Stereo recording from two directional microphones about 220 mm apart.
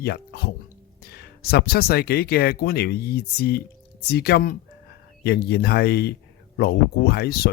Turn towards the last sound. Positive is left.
turn(degrees=45)  # may be behind; listen again after turning